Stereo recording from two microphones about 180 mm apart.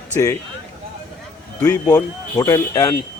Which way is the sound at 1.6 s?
15° left (ahead or behind).